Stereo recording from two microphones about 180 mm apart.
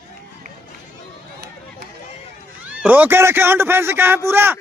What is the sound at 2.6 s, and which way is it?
Speech, 10° right (ahead or behind).